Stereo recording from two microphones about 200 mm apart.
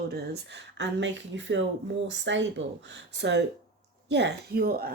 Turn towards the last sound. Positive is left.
turn(degrees=-50)  # may be behind; listen again after turning